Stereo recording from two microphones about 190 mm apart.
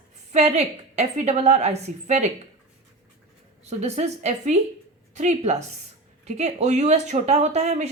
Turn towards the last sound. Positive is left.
turn(degrees=-35)  # may be behind; listen again after turning